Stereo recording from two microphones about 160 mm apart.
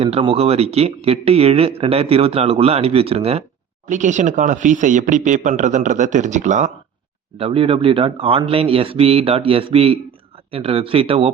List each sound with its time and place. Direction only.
0.0 s speech: 35° right (ahead or behind)
3.8 s speech: 50° right (ahead or behind)
7.3 s speech: 35° right (ahead or behind)